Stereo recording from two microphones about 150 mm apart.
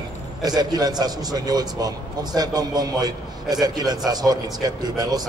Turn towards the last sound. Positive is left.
turn(degrees=-25)  # may be behind; listen again after turning